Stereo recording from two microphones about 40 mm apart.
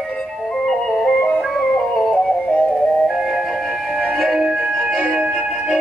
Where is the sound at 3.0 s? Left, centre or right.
Centre.